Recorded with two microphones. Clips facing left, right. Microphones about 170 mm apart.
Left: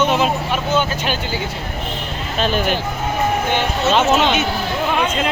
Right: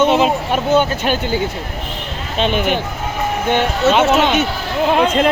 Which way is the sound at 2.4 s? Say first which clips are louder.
Right 2 dB; 20° right (ahead or behind).